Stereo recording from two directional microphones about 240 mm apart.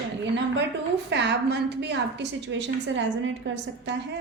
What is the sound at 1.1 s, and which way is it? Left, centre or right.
A woman's voice, right.